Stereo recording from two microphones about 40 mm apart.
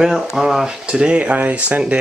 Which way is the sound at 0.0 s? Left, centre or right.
Centre.